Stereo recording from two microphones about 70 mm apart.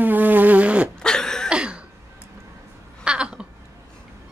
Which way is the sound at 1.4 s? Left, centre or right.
Centre.